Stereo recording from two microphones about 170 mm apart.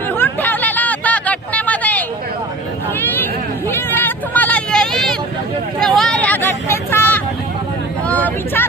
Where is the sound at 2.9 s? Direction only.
10° left (ahead or behind).